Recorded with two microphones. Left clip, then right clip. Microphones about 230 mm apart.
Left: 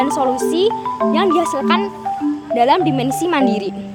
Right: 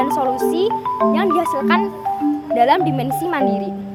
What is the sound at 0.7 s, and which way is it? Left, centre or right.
Speech, centre.